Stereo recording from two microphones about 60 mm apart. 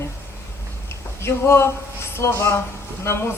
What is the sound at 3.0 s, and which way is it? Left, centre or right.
Speech, left.